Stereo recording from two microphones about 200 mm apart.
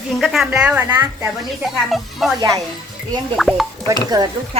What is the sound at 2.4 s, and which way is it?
Speech, 20° right (ahead or behind).